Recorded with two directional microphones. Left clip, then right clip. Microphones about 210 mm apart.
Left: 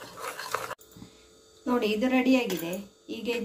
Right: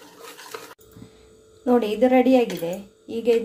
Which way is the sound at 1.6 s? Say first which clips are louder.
Right 8 dB; 35° right (ahead or behind).